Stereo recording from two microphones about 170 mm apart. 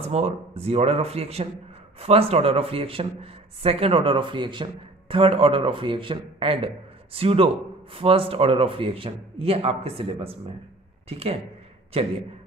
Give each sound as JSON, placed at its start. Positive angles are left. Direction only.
{"t": 0.0, "sound": "speech", "side_deg": -35}